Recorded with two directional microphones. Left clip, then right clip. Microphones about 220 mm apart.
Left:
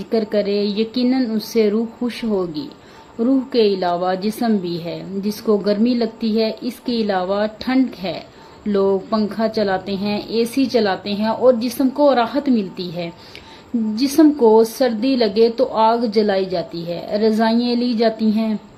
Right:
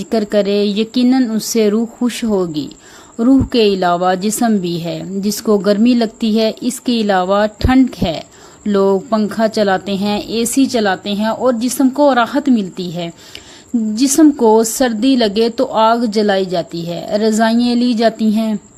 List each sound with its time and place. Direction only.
0.1 s a woman's voice: 50° right (ahead or behind)